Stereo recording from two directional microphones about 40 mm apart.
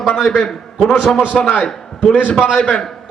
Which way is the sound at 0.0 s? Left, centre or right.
Centre.